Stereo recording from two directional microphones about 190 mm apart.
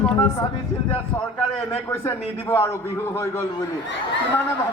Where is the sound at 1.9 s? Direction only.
15° left (ahead or behind).